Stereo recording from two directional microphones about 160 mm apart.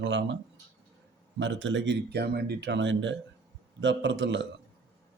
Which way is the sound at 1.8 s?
90° right.